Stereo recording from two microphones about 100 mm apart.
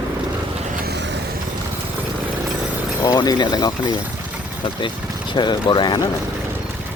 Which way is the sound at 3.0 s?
40° left (ahead or behind).